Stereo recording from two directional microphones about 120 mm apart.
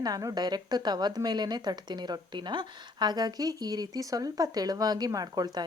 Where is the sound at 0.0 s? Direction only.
30° right (ahead or behind).